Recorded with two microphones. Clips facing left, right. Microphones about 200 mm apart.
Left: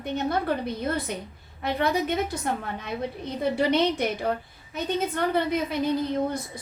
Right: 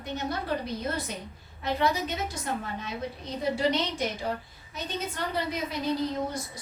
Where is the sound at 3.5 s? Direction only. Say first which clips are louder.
Left 6 dB; 60° left (ahead or behind).